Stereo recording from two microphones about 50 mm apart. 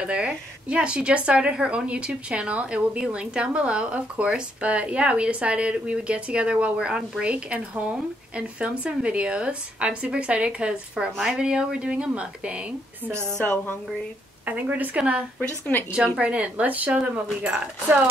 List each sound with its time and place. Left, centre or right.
0.1 s speech: right
13.1 s a woman's voice: right
14.4 s a woman's voice: right